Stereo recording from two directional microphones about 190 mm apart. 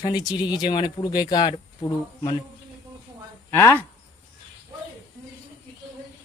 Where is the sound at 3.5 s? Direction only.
15° left (ahead or behind).